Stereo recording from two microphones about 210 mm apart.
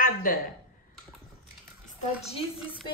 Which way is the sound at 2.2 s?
30° left (ahead or behind).